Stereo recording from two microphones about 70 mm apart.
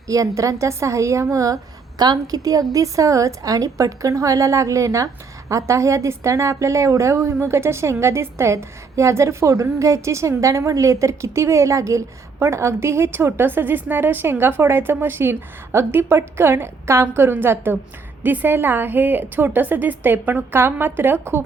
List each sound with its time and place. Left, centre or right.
0.1 s a woman's voice: right
2.0 s a woman's voice: right